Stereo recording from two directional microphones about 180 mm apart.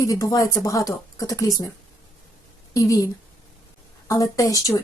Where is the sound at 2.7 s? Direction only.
20° left (ahead or behind).